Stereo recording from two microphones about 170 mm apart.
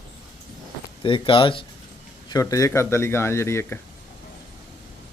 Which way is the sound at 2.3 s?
20° left (ahead or behind).